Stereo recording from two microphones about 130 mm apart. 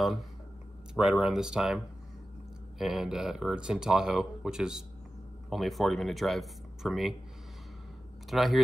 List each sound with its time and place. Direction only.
0.9 s speech: 5° right (ahead or behind)
2.8 s speech: 5° right (ahead or behind)
8.3 s speech: centre (ahead or behind)